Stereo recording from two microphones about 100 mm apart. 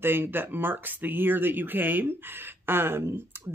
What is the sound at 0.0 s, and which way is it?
Speech, 20° right (ahead or behind).